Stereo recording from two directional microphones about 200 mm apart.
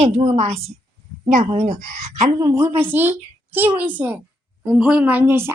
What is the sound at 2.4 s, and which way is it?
A woman's voice, 15° right (ahead or behind).